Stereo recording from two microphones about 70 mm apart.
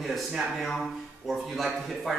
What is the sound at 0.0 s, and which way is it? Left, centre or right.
A man's voice, centre.